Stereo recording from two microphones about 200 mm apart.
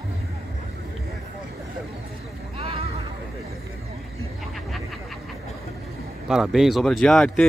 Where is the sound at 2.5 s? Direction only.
30° right (ahead or behind).